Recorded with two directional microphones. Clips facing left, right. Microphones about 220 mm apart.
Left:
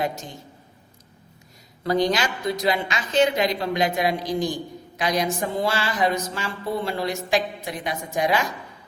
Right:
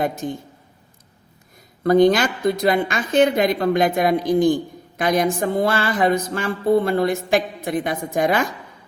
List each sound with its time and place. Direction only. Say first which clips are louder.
0.0 s a woman's voice: right 5 dB; 55° right (ahead or behind)
1.8 s a woman's voice: right 7 dB; 55° right (ahead or behind)